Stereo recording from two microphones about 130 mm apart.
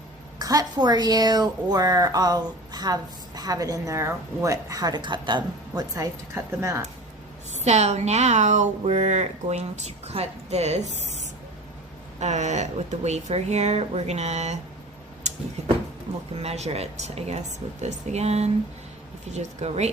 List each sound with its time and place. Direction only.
0.3 s a woman's voice: 30° right (ahead or behind)
7.5 s a woman's voice: 60° right (ahead or behind)
12.2 s a woman's voice: 60° right (ahead or behind)